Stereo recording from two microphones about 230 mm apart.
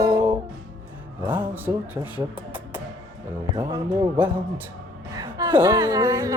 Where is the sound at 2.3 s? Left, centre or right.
Centre.